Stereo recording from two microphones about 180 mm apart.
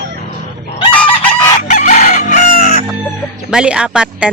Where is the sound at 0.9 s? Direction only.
10° left (ahead or behind).